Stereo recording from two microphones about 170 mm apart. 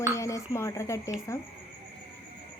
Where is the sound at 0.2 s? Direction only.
20° left (ahead or behind).